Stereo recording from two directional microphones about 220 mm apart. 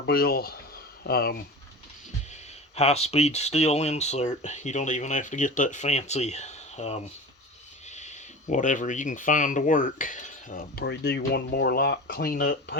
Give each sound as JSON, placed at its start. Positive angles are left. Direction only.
{"t": 0.0, "sound": "speech", "side_deg": 45}
{"t": 2.3, "sound": "speech", "side_deg": 30}